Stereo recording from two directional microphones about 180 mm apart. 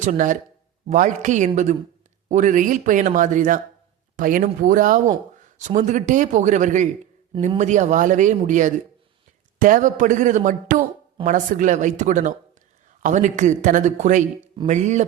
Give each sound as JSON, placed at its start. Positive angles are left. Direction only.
{"t": 0.0, "sound": "a man's voice", "side_deg": -45}